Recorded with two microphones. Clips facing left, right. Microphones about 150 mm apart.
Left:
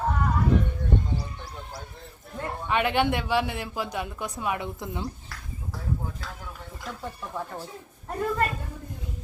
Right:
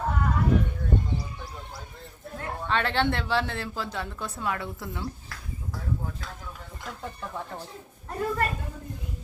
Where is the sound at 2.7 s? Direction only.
15° left (ahead or behind).